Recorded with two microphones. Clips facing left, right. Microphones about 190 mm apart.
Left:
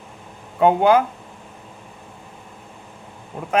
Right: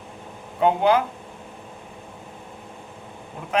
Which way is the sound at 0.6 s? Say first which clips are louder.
Left 4 dB; 50° left (ahead or behind).